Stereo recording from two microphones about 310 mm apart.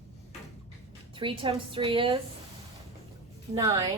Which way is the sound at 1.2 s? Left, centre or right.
Centre.